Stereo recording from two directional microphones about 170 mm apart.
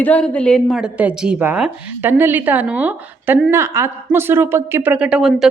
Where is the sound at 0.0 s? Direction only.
10° left (ahead or behind).